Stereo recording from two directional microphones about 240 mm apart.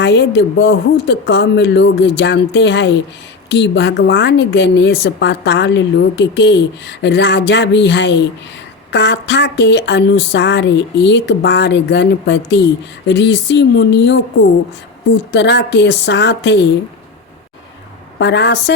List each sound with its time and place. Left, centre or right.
0.0 s a woman's voice: left
15.3 s a woman's voice: left
18.2 s a woman's voice: left